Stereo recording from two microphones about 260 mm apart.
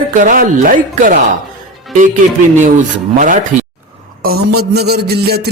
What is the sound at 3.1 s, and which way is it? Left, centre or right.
Speech, right.